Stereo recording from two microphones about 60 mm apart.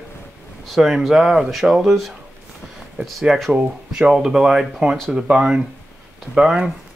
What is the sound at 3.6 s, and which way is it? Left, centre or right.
Speech, centre.